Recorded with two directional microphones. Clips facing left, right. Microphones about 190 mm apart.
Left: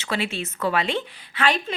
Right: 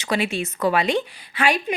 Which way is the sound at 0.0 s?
15° right (ahead or behind).